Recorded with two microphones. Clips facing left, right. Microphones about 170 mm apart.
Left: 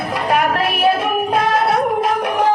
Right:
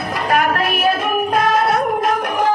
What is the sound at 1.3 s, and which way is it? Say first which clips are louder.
Music: right 1 dB; 30° left (ahead or behind).